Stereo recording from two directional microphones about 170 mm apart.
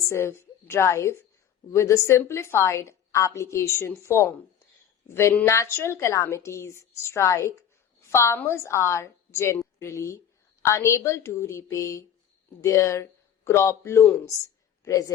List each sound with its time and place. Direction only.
0.1 s a woman's voice: 15° left (ahead or behind)